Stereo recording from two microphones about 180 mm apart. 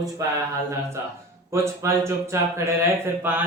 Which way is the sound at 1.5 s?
15° right (ahead or behind).